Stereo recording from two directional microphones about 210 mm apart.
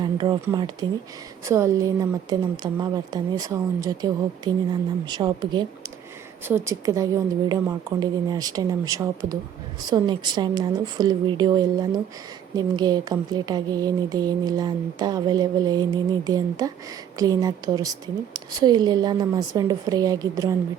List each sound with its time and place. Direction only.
0.0 s speech: 20° right (ahead or behind)